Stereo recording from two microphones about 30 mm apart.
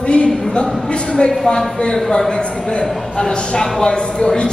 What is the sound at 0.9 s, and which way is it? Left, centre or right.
A man's voice, left.